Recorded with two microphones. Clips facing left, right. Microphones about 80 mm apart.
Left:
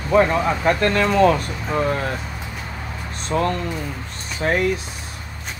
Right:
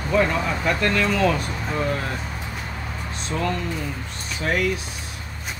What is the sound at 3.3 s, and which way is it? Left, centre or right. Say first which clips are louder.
Speech: left 4 dB; left.